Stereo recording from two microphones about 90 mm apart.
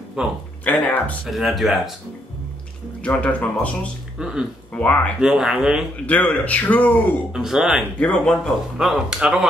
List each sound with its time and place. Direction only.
0.2 s speech: 10° right (ahead or behind)
0.7 s a man's voice: 15° left (ahead or behind)
1.2 s speech: centre (ahead or behind)
3.0 s a man's voice: 15° left (ahead or behind)
4.2 s speech: 5° right (ahead or behind)
4.7 s a man's voice: 15° left (ahead or behind)
5.2 s speech: 5° right (ahead or behind)
6.0 s a man's voice: 15° left (ahead or behind)
7.3 s speech: 5° right (ahead or behind)
8.0 s a man's voice: 10° left (ahead or behind)
8.7 s speech: 5° right (ahead or behind)